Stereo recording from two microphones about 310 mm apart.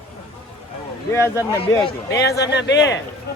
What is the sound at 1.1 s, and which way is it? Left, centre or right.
Speech, centre.